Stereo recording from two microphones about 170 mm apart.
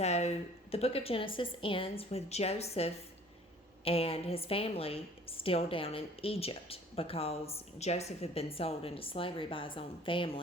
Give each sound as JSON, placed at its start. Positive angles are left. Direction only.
{"t": 0.0, "sound": "a woman's voice", "side_deg": 40}